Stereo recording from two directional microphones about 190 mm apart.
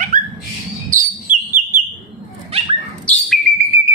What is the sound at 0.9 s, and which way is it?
Whistle, 40° right (ahead or behind).